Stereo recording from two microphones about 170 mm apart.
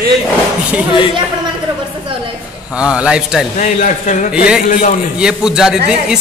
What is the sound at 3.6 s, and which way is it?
Speech, 45° left (ahead or behind).